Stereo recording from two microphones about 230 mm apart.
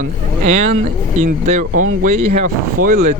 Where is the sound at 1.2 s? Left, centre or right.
Right.